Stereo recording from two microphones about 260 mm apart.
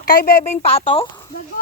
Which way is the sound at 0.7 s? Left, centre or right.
Left.